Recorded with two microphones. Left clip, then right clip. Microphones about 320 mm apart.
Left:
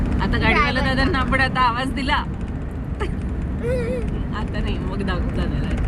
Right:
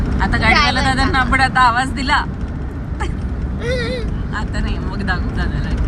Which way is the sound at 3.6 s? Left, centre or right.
Right.